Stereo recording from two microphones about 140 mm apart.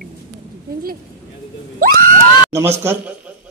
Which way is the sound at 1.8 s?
85° right.